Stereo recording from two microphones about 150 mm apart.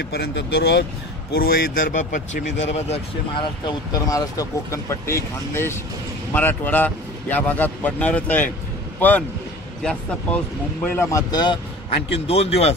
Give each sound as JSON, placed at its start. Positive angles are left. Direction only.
{"t": 0.0, "sound": "speech", "side_deg": 90}
{"t": 3.3, "sound": "speech", "side_deg": 25}
{"t": 9.8, "sound": "speech", "side_deg": 10}
{"t": 12.3, "sound": "speech", "side_deg": 40}